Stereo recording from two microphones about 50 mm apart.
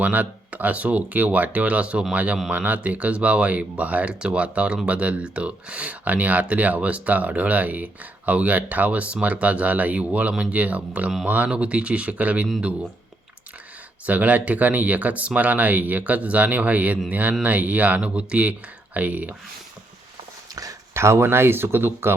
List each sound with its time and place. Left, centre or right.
0.0 s speech: right
14.1 s speech: right
20.9 s speech: right